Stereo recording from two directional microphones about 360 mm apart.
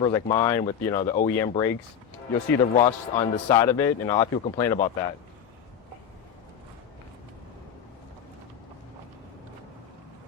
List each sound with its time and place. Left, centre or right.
0.0 s speech: centre
2.7 s speech: centre